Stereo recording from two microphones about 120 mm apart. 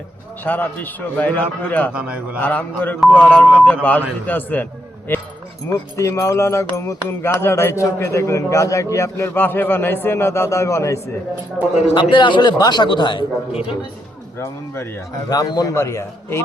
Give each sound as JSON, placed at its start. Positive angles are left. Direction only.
{"t": 0.4, "sound": "a man's voice", "side_deg": 15}
{"t": 2.0, "sound": "a man's voice", "side_deg": -10}
{"t": 2.4, "sound": "a man's voice", "side_deg": 15}
{"t": 11.9, "sound": "speech", "side_deg": 40}
{"t": 14.3, "sound": "speech", "side_deg": 20}
{"t": 15.3, "sound": "speech", "side_deg": 35}